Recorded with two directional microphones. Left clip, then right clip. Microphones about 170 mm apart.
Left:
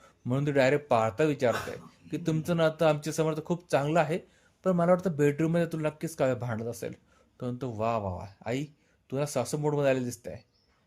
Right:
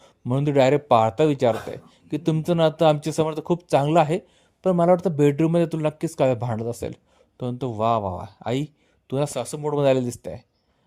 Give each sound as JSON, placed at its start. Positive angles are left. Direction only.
{"t": 0.0, "sound": "speech", "side_deg": -40}